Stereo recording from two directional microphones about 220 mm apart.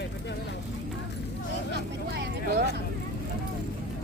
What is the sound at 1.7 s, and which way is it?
Vehicle, 50° right (ahead or behind).